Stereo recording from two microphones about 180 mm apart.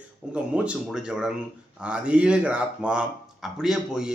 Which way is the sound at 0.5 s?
5° right (ahead or behind).